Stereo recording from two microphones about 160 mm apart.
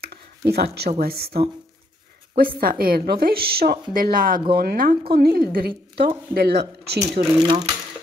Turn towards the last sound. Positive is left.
turn(degrees=-30)  # may be behind; listen again after turning